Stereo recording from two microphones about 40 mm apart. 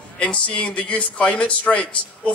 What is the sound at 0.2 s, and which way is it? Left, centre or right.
A man's voice, left.